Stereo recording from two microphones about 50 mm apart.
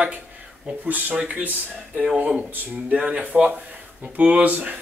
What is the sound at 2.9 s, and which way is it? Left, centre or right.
Speech, right.